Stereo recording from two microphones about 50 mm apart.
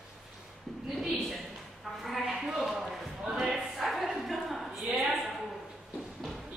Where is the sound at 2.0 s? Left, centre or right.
Centre.